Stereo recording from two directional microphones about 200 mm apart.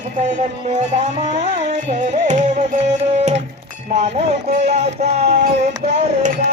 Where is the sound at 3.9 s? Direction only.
35° right (ahead or behind).